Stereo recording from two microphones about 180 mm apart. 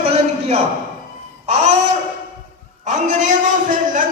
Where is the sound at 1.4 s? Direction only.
35° right (ahead or behind).